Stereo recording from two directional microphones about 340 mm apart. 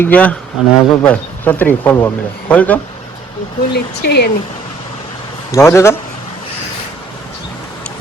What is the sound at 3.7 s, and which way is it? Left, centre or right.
Speech, left.